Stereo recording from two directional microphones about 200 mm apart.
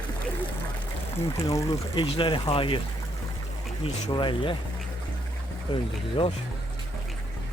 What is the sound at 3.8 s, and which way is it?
Speech, 25° left (ahead or behind).